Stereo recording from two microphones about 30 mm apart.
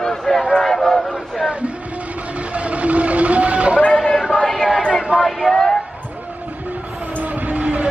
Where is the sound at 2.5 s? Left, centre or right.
Right.